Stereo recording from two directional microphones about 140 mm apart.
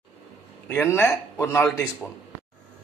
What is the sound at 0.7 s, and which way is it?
A man's voice, 15° left (ahead or behind).